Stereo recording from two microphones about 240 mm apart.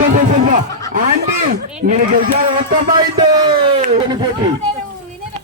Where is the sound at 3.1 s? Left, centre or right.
Centre.